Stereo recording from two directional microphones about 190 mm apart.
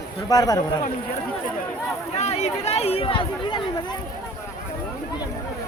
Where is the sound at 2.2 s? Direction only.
35° left (ahead or behind).